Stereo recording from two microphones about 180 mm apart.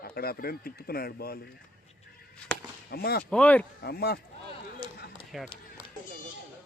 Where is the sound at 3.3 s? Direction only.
10° left (ahead or behind).